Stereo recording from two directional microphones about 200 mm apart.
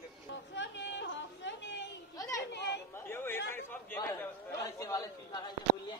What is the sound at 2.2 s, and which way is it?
A child's voice, 15° left (ahead or behind).